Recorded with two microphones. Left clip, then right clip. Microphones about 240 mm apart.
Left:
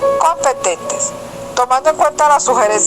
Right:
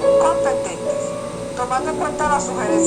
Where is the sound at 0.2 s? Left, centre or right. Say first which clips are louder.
Left 3 dB; left.